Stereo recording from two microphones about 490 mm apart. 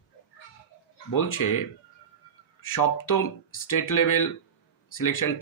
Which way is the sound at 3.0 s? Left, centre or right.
Left.